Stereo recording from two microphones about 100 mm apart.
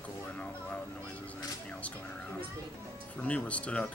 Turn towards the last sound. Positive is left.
turn(degrees=10)  # may be behind; listen again after turning